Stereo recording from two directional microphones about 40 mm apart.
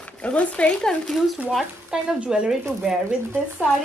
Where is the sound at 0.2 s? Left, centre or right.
Left.